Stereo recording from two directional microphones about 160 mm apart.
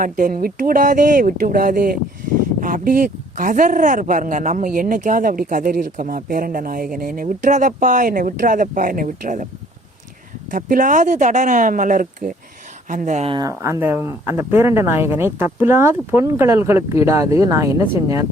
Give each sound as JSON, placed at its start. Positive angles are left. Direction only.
{"t": 0.0, "sound": "speech", "side_deg": -55}
{"t": 10.5, "sound": "speech", "side_deg": -55}
{"t": 13.3, "sound": "speech", "side_deg": -20}